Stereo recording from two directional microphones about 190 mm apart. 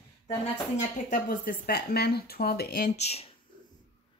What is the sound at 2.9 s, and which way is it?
Speech, 35° left (ahead or behind).